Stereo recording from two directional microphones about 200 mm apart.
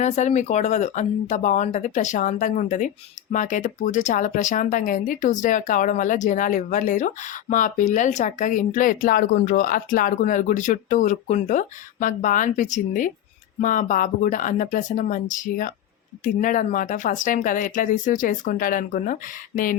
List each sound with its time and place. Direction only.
0.0 s speech: 35° left (ahead or behind)